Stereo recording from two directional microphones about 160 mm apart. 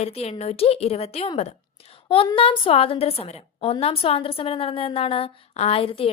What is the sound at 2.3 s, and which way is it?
A woman's voice, 35° left (ahead or behind).